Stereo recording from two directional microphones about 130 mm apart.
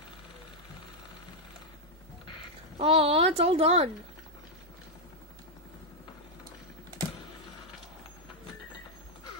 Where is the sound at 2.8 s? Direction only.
50° right (ahead or behind).